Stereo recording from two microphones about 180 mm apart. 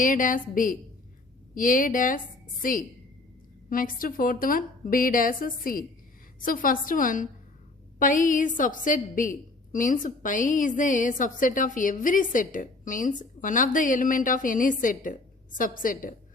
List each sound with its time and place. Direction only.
0.0 s a woman's voice: 50° left (ahead or behind)